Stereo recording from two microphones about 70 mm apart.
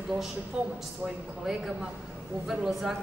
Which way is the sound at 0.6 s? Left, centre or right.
Centre.